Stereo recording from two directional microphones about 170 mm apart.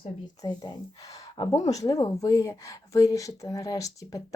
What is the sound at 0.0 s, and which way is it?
Speech, 25° left (ahead or behind).